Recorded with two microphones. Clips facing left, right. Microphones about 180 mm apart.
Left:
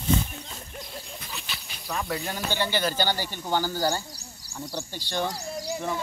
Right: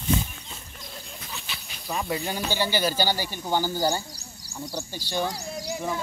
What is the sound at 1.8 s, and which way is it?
Speech, 15° right (ahead or behind).